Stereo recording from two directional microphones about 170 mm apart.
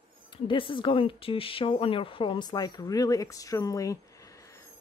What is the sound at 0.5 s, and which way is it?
Speech, 30° left (ahead or behind).